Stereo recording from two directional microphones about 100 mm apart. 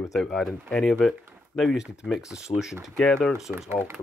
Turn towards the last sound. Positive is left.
turn(degrees=0)  # may be behind; listen again after turning